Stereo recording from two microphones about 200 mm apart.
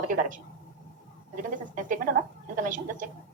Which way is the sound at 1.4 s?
40° right (ahead or behind).